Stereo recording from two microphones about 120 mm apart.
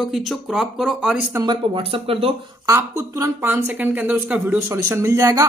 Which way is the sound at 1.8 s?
50° right (ahead or behind).